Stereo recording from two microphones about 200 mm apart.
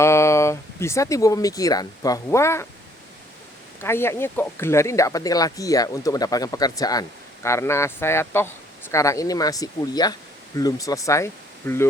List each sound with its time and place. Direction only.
0.0 s speech: 15° left (ahead or behind)
3.8 s speech: 10° left (ahead or behind)